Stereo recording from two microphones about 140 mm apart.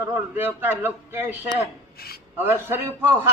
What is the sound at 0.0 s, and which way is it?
A man's voice, 15° right (ahead or behind).